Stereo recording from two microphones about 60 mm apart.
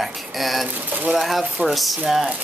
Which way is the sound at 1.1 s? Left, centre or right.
Centre.